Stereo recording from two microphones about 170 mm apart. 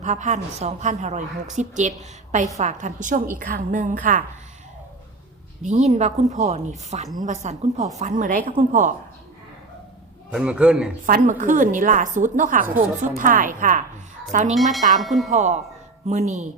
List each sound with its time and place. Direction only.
0.0 s a woman's voice: 45° right (ahead or behind)
5.6 s a woman's voice: 45° right (ahead or behind)
10.3 s a man's voice: 5° right (ahead or behind)
11.0 s a woman's voice: 50° right (ahead or behind)
14.5 s a man's voice: centre (ahead or behind)
15.3 s a woman's voice: 45° right (ahead or behind)